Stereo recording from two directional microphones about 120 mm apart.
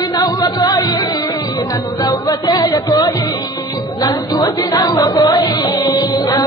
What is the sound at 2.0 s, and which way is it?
Music, 35° left (ahead or behind).